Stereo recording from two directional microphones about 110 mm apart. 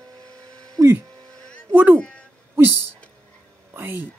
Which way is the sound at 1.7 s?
15° right (ahead or behind).